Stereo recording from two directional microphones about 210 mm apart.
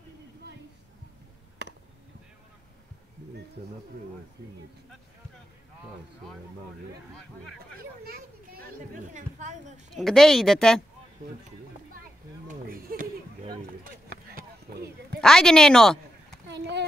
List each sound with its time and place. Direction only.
8.0 s children playing: 45° right (ahead or behind)
9.1 s a woman's voice: 35° right (ahead or behind)
9.9 s speech: centre (ahead or behind)
12.0 s a sound: 45° right (ahead or behind)
15.1 s speech: 5° left (ahead or behind)
16.4 s a sound: 55° right (ahead or behind)